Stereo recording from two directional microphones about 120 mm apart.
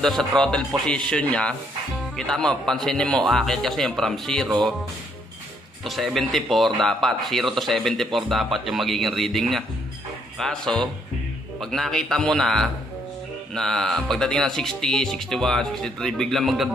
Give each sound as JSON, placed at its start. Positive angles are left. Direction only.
{"t": 0.0, "sound": "speech", "side_deg": 5}
{"t": 5.9, "sound": "speech", "side_deg": 0}